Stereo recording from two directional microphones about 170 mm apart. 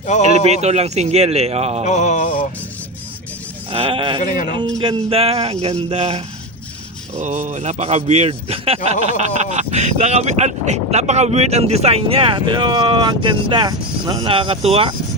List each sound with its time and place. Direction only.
0.0 s music: 45° left (ahead or behind)
0.4 s speech: 40° right (ahead or behind)
1.8 s music: 45° left (ahead or behind)
3.7 s speech: 35° right (ahead or behind)
4.2 s music: 45° left (ahead or behind)
4.8 s speech: 30° right (ahead or behind)